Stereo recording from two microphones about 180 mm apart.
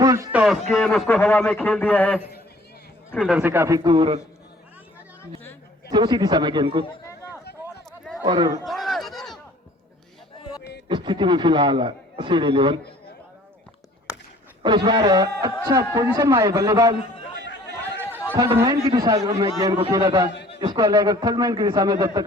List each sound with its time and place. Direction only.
0.0 s a sound: 15° right (ahead or behind)
0.3 s a man's voice: centre (ahead or behind)
1.0 s a man's voice: 10° left (ahead or behind)
3.2 s a man's voice: 5° right (ahead or behind)
3.8 s speech: 25° right (ahead or behind)
5.9 s speech: 25° right (ahead or behind)
8.2 s speech: 20° right (ahead or behind)
8.6 s a sound: centre (ahead or behind)
10.8 s speech: 25° right (ahead or behind)
14.1 s a sound: 5° right (ahead or behind)
14.6 s speech: 25° right (ahead or behind)
18.0 s speech: 10° right (ahead or behind)
20.3 s a sound: 70° left (ahead or behind)
20.6 s speech: 20° right (ahead or behind)